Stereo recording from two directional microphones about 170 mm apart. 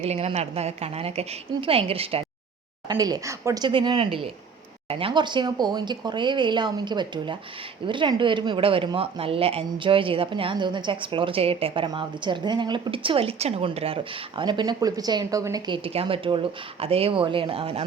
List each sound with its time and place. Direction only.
0.0 s speech: 40° right (ahead or behind)
2.9 s speech: 20° right (ahead or behind)